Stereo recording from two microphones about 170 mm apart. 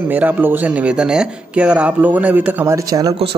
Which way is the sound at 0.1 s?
10° right (ahead or behind).